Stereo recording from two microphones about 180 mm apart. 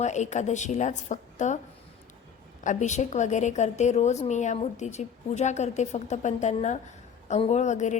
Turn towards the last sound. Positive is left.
turn(degrees=40)  # may be behind; listen again after turning